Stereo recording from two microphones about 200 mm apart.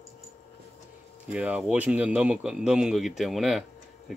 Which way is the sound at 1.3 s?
5° right (ahead or behind).